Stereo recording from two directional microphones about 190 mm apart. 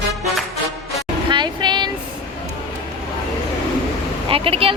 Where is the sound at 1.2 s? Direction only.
25° right (ahead or behind).